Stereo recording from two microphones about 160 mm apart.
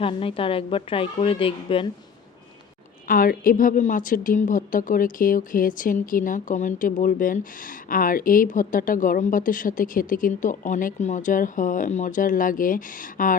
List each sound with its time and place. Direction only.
0.0 s a woman's voice: 35° left (ahead or behind)
3.1 s a woman's voice: 60° left (ahead or behind)